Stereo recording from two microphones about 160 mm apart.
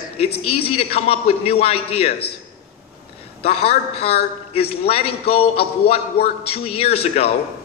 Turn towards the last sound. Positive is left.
turn(degrees=40)  # may be behind; listen again after turning